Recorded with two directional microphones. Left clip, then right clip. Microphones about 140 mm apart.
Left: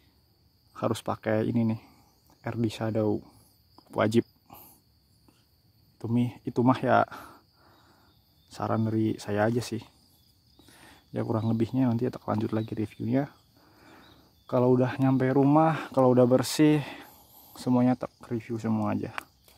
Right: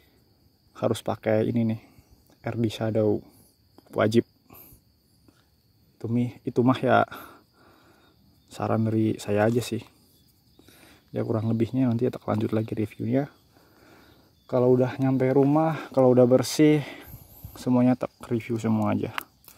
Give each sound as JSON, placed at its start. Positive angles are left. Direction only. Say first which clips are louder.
{"t": 0.7, "sound": "speech", "louder": "right 3 dB", "side_deg": -10}
{"t": 5.9, "sound": "speech", "louder": "right 1 dB", "side_deg": 0}
{"t": 10.6, "sound": "speech", "louder": "even", "side_deg": 0}
{"t": 14.4, "sound": "speech", "louder": "right 3 dB", "side_deg": 5}
{"t": 17.6, "sound": "speech", "louder": "right 3 dB", "side_deg": -20}